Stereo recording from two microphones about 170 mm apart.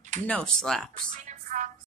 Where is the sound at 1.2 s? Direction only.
45° right (ahead or behind).